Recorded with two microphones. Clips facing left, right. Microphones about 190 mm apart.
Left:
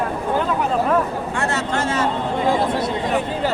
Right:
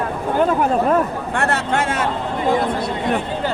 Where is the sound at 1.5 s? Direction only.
55° right (ahead or behind).